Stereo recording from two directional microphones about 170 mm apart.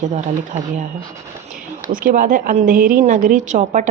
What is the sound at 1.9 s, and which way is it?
A woman's voice, 50° right (ahead or behind).